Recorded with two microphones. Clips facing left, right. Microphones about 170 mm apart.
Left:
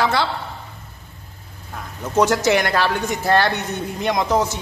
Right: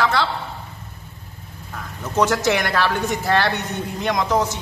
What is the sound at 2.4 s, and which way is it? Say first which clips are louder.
Speech: left 2 dB; centre (ahead or behind).